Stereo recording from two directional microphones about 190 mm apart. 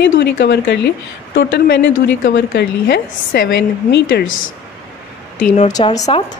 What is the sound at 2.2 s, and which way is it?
Speech, 60° left (ahead or behind).